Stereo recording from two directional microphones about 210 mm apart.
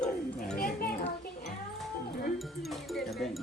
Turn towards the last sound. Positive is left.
turn(degrees=0)  # may be behind; listen again after turning